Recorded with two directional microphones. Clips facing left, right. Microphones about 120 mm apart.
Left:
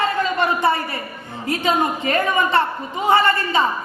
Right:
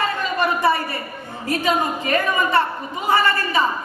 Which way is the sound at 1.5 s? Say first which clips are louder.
Left 1 dB; 25° left (ahead or behind).